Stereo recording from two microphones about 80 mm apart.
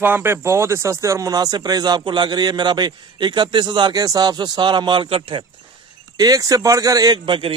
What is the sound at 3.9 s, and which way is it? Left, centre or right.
Speech, right.